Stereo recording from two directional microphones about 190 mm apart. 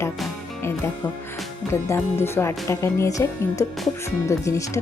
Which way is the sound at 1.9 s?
15° left (ahead or behind).